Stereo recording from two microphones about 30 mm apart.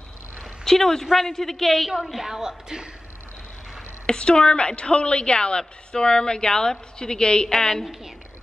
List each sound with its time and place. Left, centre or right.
0.7 s a man's voice: centre
2.2 s speech: centre
4.2 s a woman's voice: left
7.4 s a man's voice: centre